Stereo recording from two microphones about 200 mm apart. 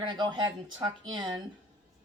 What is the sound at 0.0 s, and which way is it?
Speech, 20° right (ahead or behind).